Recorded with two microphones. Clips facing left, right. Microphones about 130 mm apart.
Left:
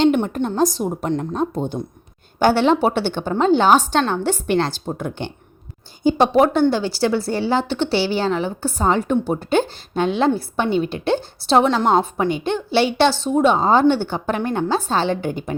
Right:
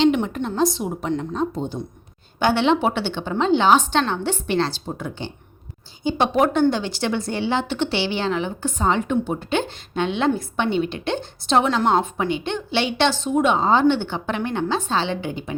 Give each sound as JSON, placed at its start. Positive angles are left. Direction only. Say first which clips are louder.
{"t": 0.0, "sound": "a woman's voice", "louder": "left 2 dB", "side_deg": 40}
{"t": 2.4, "sound": "a woman's voice", "louder": "left 3 dB", "side_deg": 40}
{"t": 6.0, "sound": "a woman's voice", "louder": "left 4 dB", "side_deg": 40}
{"t": 11.8, "sound": "a woman's voice", "louder": "left 2 dB", "side_deg": 5}
{"t": 12.0, "sound": "a woman's voice", "louder": "left 3 dB", "side_deg": 35}